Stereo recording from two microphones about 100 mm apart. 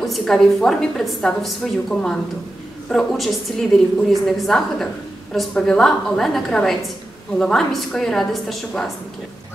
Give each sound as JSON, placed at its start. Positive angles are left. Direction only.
{"t": 0.0, "sound": "a woman's voice", "side_deg": 5}